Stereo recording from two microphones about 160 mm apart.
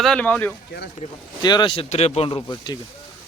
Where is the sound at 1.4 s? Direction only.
30° left (ahead or behind).